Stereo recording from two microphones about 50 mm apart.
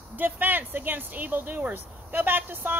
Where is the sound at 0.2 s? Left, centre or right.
Right.